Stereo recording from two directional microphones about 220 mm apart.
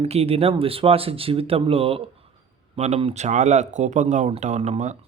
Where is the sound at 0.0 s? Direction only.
25° right (ahead or behind).